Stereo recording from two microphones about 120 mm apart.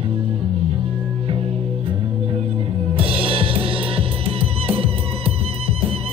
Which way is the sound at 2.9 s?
50° right (ahead or behind).